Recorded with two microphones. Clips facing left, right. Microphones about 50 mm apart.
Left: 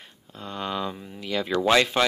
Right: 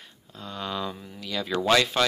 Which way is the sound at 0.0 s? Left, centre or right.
Left.